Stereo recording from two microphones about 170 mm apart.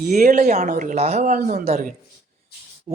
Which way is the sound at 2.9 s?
40° right (ahead or behind).